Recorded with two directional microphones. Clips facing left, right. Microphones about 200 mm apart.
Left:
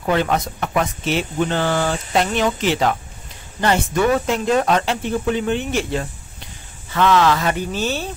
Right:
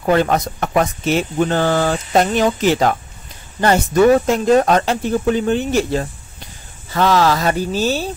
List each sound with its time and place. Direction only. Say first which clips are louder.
0.0 s speech: right 4 dB; 45° right (ahead or behind)